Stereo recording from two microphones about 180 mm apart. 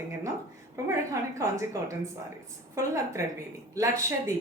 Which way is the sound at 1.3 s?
15° right (ahead or behind).